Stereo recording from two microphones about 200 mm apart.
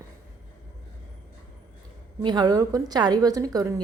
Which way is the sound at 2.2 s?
20° right (ahead or behind).